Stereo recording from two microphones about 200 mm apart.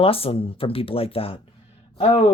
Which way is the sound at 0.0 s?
30° left (ahead or behind).